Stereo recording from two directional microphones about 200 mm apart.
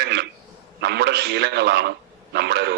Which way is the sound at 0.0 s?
55° right (ahead or behind).